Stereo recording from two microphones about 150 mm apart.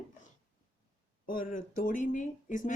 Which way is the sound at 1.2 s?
65° left (ahead or behind).